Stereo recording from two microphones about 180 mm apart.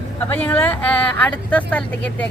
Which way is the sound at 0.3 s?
10° left (ahead or behind).